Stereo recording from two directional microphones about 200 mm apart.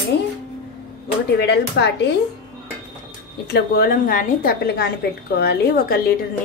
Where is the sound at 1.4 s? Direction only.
60° left (ahead or behind).